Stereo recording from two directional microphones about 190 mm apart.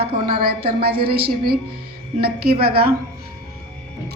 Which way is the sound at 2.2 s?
55° right (ahead or behind).